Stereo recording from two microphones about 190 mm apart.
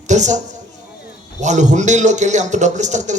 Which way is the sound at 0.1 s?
40° right (ahead or behind).